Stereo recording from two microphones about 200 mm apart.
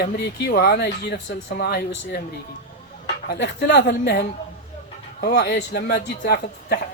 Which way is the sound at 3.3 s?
55° left (ahead or behind).